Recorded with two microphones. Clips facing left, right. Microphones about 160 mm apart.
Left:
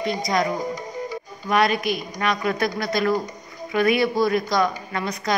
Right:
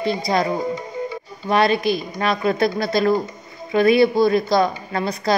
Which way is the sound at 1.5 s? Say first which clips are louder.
Right 3 dB; 30° right (ahead or behind).